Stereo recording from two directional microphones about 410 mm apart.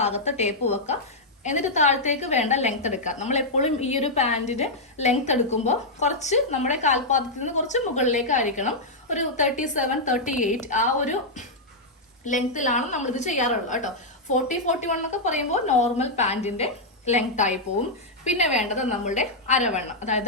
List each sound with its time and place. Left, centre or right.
0.0 s a woman's voice: centre